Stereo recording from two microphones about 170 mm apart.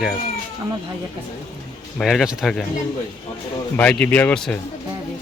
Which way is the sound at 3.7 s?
10° left (ahead or behind).